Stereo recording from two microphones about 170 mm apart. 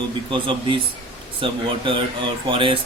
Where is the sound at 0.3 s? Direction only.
30° right (ahead or behind).